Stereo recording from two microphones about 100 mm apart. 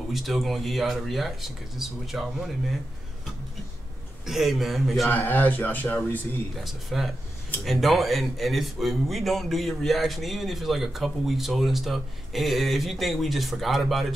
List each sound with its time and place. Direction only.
0.1 s a man's voice: centre (ahead or behind)
4.3 s a man's voice: centre (ahead or behind)
5.0 s speech: 20° left (ahead or behind)
6.5 s a man's voice: centre (ahead or behind)